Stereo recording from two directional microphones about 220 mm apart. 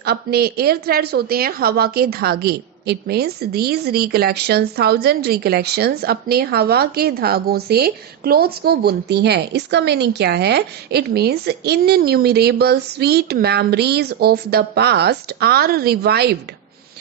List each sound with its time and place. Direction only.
0.0 s a woman's voice: 45° right (ahead or behind)